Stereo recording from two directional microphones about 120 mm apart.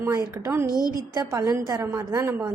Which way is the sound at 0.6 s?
30° left (ahead or behind).